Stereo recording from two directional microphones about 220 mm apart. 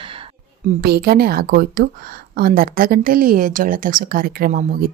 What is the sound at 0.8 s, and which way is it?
A woman's voice, 45° right (ahead or behind).